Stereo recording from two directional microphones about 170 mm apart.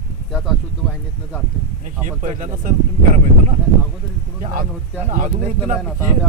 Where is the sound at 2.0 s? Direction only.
50° right (ahead or behind).